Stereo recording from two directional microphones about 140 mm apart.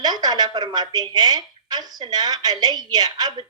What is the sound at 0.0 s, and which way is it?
A woman's voice, 30° right (ahead or behind).